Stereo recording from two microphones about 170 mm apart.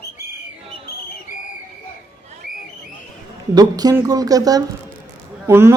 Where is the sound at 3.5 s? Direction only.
20° right (ahead or behind).